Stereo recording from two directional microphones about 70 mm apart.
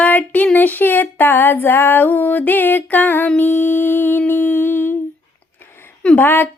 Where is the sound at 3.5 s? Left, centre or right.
Left.